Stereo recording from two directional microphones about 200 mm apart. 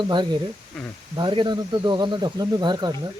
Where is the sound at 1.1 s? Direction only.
25° right (ahead or behind).